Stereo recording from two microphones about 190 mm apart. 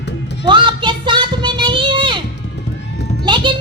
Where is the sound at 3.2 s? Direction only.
25° right (ahead or behind).